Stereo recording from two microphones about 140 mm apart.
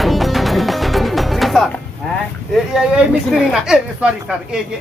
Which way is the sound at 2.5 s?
5° right (ahead or behind).